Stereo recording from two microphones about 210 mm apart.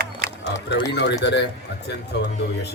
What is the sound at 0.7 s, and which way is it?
Speech, 55° left (ahead or behind).